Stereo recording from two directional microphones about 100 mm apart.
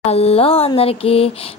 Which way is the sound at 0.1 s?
90° left.